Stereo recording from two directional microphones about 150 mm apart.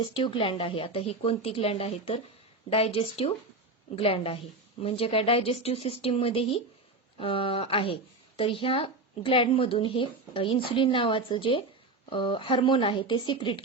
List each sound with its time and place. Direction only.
0.0 s a woman's voice: 35° left (ahead or behind)